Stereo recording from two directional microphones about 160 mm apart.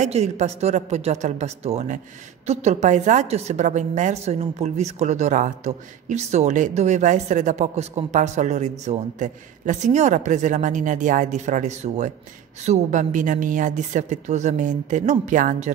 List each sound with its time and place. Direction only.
0.0 s a woman's voice: 45° right (ahead or behind)